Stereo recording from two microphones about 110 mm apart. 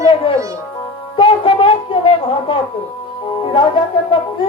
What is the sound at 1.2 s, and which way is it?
A woman's voice, 50° left (ahead or behind).